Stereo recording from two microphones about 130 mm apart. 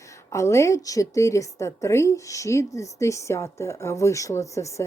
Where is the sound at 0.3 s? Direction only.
25° left (ahead or behind).